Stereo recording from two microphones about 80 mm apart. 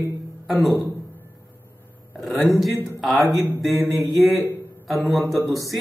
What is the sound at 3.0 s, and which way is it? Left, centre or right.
A man's voice, centre.